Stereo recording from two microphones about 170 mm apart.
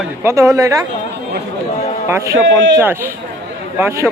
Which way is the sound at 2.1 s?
15° right (ahead or behind).